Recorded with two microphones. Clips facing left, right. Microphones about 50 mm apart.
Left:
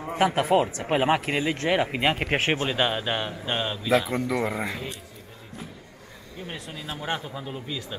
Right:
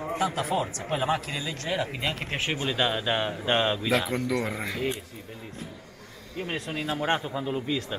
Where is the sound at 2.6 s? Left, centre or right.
Centre.